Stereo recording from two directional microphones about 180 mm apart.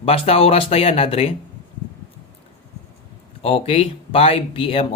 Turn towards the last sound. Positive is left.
turn(degrees=30)  # may be behind; listen again after turning